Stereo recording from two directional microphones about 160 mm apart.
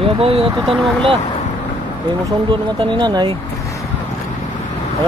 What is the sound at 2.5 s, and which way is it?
Speech, 30° right (ahead or behind).